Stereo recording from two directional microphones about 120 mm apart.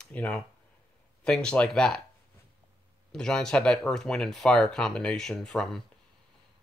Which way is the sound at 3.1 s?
5° left (ahead or behind).